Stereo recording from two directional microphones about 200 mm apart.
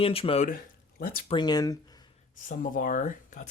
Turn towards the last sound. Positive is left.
turn(degrees=40)  # may be behind; listen again after turning